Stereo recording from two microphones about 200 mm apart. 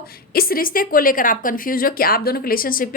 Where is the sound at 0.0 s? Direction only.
50° left (ahead or behind).